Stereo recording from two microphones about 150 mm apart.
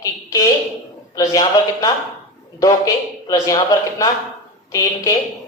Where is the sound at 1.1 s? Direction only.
25° left (ahead or behind).